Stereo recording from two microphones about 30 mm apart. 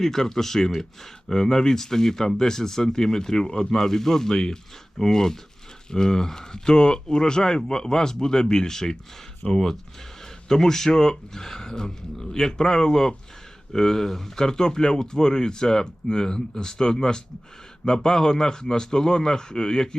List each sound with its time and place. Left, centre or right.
0.0 s speech: centre